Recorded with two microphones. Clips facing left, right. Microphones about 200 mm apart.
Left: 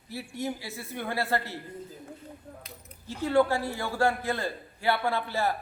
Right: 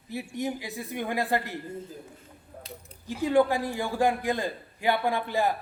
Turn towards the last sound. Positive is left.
turn(degrees=-15)  # may be behind; listen again after turning